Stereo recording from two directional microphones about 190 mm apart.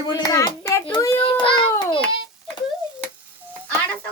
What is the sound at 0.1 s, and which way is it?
Hands, 20° left (ahead or behind).